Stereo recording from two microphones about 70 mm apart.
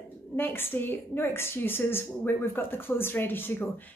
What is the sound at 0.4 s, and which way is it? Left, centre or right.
A woman's voice, left.